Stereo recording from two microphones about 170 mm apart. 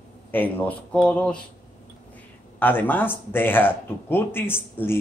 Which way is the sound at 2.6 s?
10° left (ahead or behind).